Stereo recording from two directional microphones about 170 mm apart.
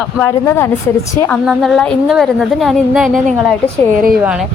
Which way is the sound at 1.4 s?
Centre (ahead or behind).